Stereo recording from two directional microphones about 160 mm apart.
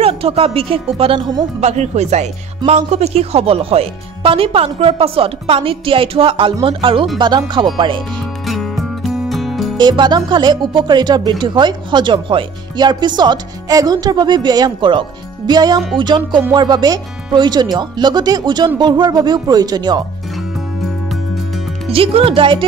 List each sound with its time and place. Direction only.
0.0 s speech: 40° right (ahead or behind)
1.6 s speech: 45° right (ahead or behind)
8.5 s music: centre (ahead or behind)
9.8 s speech: 25° right (ahead or behind)
21.9 s speech: 35° right (ahead or behind)